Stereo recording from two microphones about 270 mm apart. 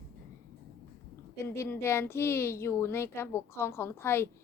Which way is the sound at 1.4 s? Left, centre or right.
Centre.